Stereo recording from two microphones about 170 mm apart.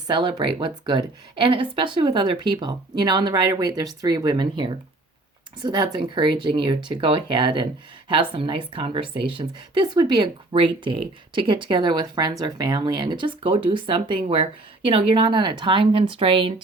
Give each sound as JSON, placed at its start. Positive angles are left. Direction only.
{"t": 0.1, "sound": "speech", "side_deg": -25}